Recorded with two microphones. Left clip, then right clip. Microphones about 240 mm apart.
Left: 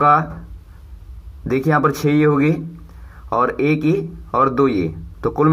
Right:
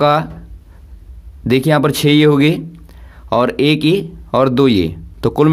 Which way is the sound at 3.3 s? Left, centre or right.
Right.